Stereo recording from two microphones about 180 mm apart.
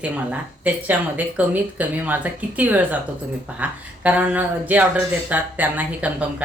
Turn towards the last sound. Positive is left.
turn(degrees=-10)  # may be behind; listen again after turning